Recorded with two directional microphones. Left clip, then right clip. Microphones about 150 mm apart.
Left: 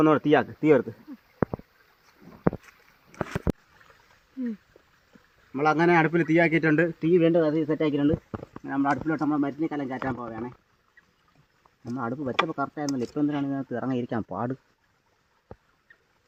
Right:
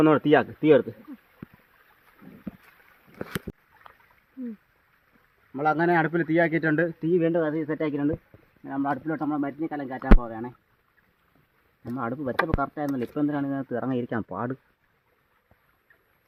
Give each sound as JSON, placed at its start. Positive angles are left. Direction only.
{"t": 0.0, "sound": "speech", "side_deg": 0}
{"t": 0.6, "sound": "speech", "side_deg": 15}
{"t": 5.5, "sound": "speech", "side_deg": -15}
{"t": 6.6, "sound": "speech", "side_deg": -20}
{"t": 7.2, "sound": "speech", "side_deg": 0}
{"t": 8.6, "sound": "speech", "side_deg": -15}
{"t": 8.9, "sound": "speech", "side_deg": 0}
{"t": 11.9, "sound": "speech", "side_deg": 0}